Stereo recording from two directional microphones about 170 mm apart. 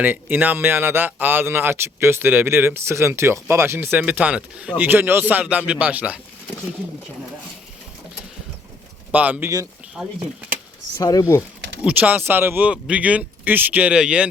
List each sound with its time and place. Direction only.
0.0 s speech: 10° right (ahead or behind)
9.1 s speech: 10° right (ahead or behind)
10.9 s speech: 20° left (ahead or behind)
11.8 s speech: 10° right (ahead or behind)